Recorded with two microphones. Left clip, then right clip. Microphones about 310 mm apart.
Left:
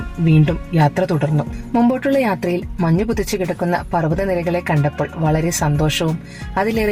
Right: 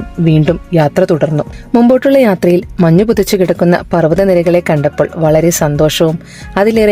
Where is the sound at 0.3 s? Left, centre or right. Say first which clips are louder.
Right 7 dB; right.